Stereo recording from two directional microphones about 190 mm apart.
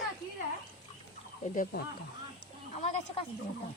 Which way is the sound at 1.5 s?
45° left (ahead or behind).